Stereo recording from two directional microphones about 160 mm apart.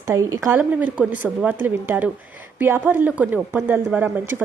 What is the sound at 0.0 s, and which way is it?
A woman's voice, 15° right (ahead or behind).